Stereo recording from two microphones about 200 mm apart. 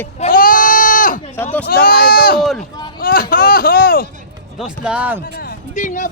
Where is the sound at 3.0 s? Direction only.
45° left (ahead or behind).